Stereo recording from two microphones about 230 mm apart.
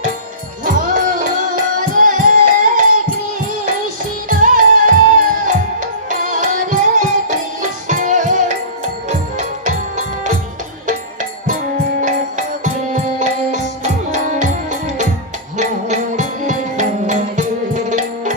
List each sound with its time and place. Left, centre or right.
0.6 s music: right
4.3 s music: right
11.9 s music: right